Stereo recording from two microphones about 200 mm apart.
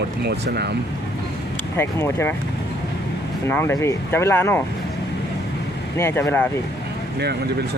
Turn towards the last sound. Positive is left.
turn(degrees=10)  # may be behind; listen again after turning